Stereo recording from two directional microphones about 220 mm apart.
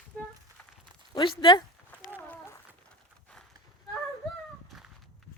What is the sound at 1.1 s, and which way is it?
Speech, 20° left (ahead or behind).